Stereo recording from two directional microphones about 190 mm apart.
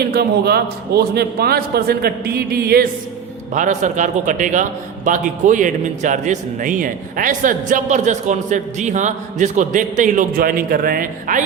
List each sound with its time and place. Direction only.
0.0 s a man's voice: 55° right (ahead or behind)
3.5 s a man's voice: 40° right (ahead or behind)